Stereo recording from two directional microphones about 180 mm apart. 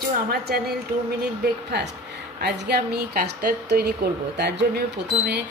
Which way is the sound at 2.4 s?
70° right (ahead or behind).